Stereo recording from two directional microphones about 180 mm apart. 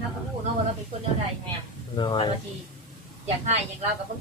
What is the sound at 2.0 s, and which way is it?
Speech, 25° left (ahead or behind).